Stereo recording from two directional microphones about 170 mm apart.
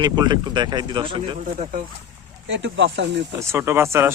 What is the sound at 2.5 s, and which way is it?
Speech, 90° right.